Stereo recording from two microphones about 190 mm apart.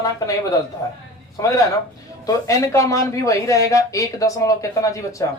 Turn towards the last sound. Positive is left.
turn(degrees=15)  # may be behind; listen again after turning